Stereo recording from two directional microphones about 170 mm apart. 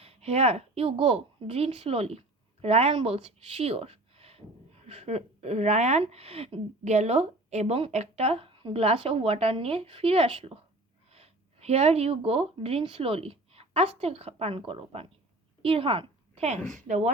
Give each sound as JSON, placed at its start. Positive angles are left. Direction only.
{"t": 0.0, "sound": "a woman's voice", "side_deg": -35}